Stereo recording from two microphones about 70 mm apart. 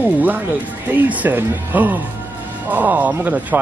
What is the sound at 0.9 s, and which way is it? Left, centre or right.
Speech, right.